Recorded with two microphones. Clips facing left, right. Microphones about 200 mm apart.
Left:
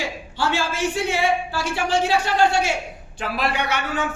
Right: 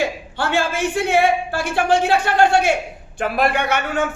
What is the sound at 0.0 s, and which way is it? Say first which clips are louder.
A man's voice: right 3 dB; 55° right (ahead or behind).